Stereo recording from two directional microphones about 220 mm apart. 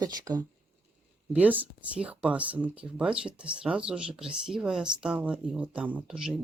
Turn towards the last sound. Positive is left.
turn(degrees=-5)  # may be behind; listen again after turning